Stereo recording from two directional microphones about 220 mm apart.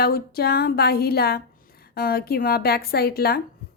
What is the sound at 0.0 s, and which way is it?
A woman's voice, 45° left (ahead or behind).